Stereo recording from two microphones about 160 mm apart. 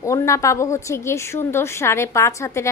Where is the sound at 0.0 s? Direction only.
20° left (ahead or behind).